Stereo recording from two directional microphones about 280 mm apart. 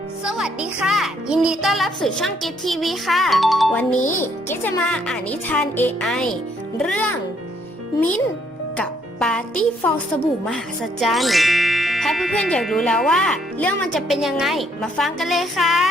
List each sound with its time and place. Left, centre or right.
0.3 s speech: centre
8.8 s speech: centre
11.0 s speech: centre